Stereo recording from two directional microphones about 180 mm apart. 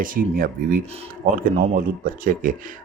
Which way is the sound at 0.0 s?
50° right (ahead or behind).